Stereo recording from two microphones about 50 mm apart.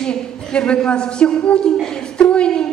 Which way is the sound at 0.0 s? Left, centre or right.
Centre.